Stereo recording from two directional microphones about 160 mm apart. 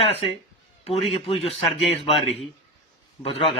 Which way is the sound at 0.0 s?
35° left (ahead or behind).